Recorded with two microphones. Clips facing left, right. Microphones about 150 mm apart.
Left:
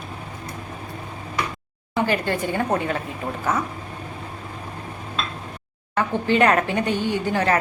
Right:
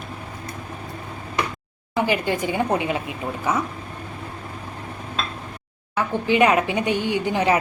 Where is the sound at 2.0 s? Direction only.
15° right (ahead or behind).